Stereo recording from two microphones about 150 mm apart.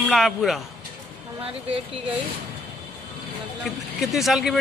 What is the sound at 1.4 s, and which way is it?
Speech, 40° right (ahead or behind).